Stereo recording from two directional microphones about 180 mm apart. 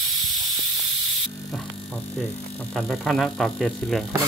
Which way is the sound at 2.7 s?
Centre (ahead or behind).